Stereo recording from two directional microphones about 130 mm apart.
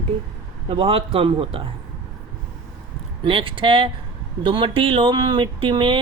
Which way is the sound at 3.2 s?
45° right (ahead or behind).